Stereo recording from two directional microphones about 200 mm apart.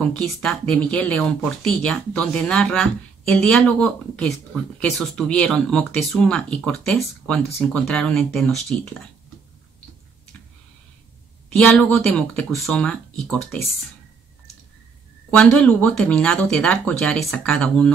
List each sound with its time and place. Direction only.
0.0 s speech: 5° left (ahead or behind)
11.5 s speech: 5° left (ahead or behind)
15.3 s speech: 5° left (ahead or behind)